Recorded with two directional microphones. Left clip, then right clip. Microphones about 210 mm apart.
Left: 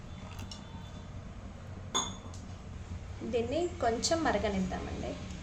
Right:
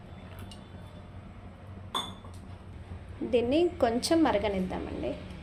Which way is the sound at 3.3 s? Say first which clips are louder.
Right 6 dB; 35° right (ahead or behind).